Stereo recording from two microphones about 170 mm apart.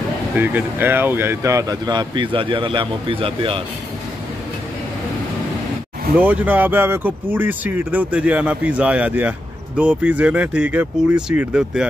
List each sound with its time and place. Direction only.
0.4 s speech: 10° right (ahead or behind); by 3.6 s 30° right (ahead or behind)
6.1 s speech: 10° right (ahead or behind)